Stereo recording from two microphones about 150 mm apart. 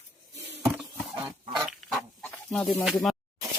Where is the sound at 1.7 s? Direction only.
5° left (ahead or behind).